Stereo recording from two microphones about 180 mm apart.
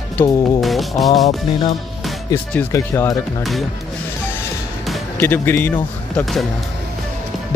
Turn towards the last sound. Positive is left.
turn(degrees=0)  # may be behind; listen again after turning